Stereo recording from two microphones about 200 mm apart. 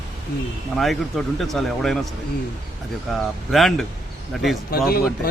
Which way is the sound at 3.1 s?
Centre (ahead or behind).